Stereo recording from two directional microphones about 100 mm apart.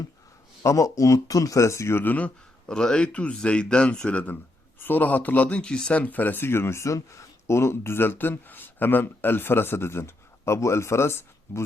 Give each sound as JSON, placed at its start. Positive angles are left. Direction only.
{"t": 0.6, "sound": "speech", "side_deg": 30}